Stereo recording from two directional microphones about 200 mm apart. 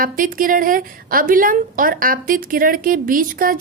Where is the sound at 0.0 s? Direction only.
45° right (ahead or behind).